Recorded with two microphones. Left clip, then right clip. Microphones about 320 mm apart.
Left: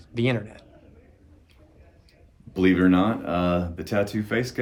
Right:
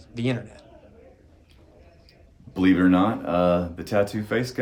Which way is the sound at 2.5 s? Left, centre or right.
Centre.